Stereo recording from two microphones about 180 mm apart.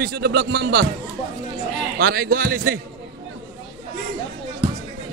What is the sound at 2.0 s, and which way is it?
Speech, 55° right (ahead or behind).